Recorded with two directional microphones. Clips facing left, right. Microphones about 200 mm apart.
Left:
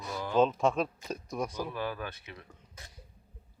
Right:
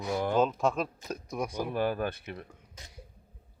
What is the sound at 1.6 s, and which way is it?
Speech, 50° right (ahead or behind).